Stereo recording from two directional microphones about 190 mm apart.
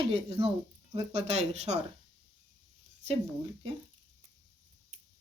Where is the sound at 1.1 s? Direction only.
35° right (ahead or behind).